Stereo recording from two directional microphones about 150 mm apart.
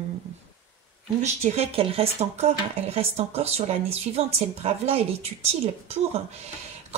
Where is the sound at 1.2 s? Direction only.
45° right (ahead or behind).